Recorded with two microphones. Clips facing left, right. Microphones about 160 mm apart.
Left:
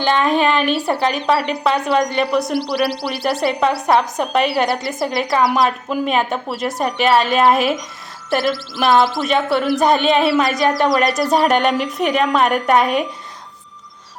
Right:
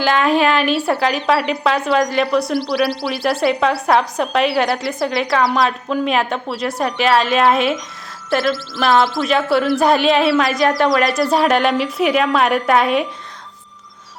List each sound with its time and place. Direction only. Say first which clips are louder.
0.0 s a woman's voice: right 1 dB; 5° right (ahead or behind)